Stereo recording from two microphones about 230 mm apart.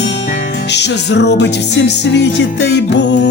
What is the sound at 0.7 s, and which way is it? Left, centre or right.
Music, left.